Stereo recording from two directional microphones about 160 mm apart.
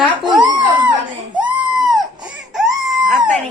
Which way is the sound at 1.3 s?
5° right (ahead or behind).